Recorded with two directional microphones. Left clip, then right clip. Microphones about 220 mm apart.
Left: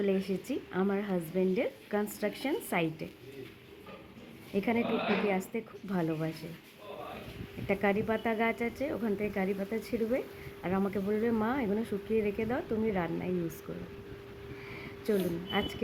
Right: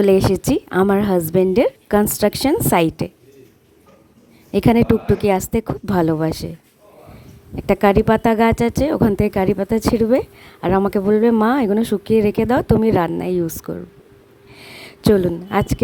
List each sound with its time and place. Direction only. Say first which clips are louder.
0.0 s speech: right 18 dB; 55° right (ahead or behind)
4.5 s a woman's voice: right 15 dB; 55° right (ahead or behind)
7.7 s speech: right 16 dB; 60° right (ahead or behind)